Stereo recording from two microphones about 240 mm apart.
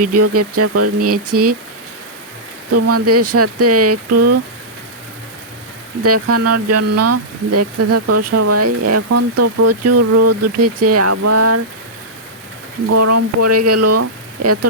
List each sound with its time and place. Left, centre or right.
0.0 s speech: right
2.7 s speech: right
6.0 s speech: right
12.9 s speech: right